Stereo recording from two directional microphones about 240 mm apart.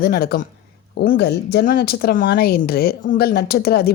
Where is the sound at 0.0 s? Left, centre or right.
Left.